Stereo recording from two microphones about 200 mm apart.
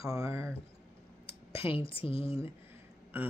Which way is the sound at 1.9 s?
25° left (ahead or behind).